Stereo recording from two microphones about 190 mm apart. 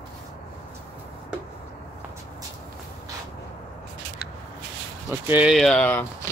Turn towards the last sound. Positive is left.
turn(degrees=10)  # may be behind; listen again after turning